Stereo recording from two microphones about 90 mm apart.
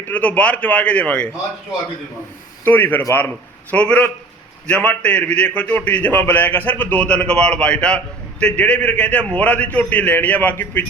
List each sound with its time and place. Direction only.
0.1 s a man's voice: 15° left (ahead or behind)
2.6 s a man's voice: 20° left (ahead or behind)